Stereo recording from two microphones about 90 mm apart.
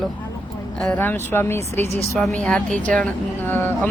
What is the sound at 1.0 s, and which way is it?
Speech, 25° left (ahead or behind).